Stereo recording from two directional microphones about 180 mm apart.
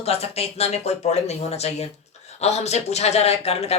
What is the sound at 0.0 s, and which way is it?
Speech, 35° left (ahead or behind).